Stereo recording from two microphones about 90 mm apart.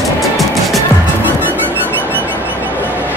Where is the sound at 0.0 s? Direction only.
Centre (ahead or behind).